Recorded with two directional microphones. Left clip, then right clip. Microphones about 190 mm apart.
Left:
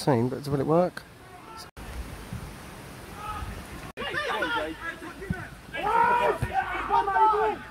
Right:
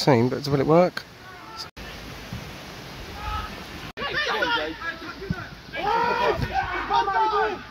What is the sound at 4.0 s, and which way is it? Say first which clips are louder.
Chatter: right 4 dB; 45° right (ahead or behind).